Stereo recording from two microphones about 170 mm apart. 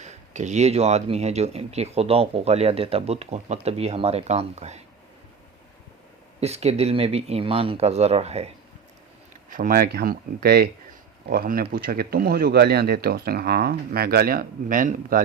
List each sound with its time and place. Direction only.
0.0 s speech: 45° right (ahead or behind)
6.4 s speech: 40° right (ahead or behind)
9.5 s speech: 55° right (ahead or behind)